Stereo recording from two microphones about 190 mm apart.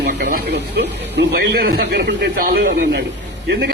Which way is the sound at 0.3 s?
55° right (ahead or behind).